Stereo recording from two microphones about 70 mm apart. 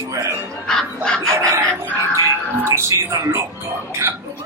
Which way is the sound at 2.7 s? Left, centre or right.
Right.